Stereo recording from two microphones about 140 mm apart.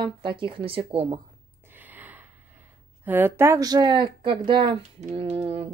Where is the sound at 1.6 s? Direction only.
15° right (ahead or behind).